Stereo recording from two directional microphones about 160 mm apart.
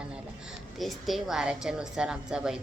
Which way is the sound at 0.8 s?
Centre (ahead or behind).